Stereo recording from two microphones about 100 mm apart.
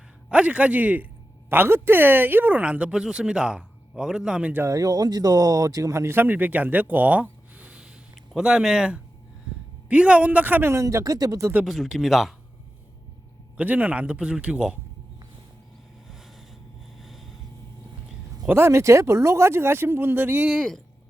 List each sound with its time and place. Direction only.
0.3 s speech: 10° right (ahead or behind)
4.6 s speech: 35° right (ahead or behind)
11.6 s speech: 5° right (ahead or behind)
13.6 s speech: 15° right (ahead or behind)
16.0 s boat: centre (ahead or behind)
17.0 s vehicle: centre (ahead or behind)
18.4 s speech: 25° right (ahead or behind)
20.5 s speech: 5° left (ahead or behind)